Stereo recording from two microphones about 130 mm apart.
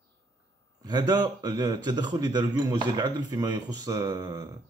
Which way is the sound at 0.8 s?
30° right (ahead or behind).